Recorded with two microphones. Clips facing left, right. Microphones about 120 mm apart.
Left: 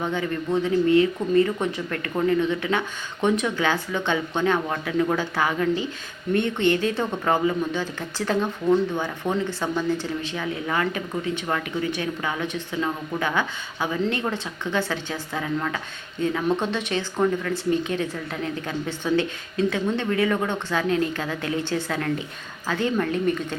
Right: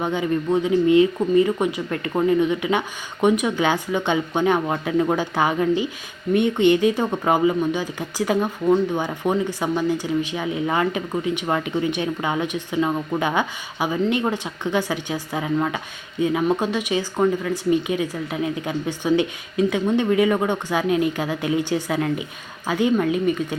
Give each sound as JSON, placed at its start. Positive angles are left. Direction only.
{"t": 0.0, "sound": "speech", "side_deg": -15}